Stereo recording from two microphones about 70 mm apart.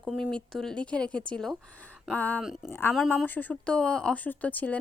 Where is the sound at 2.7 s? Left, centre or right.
Left.